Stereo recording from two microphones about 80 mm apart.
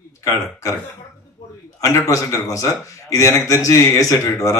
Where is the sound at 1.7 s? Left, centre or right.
Left.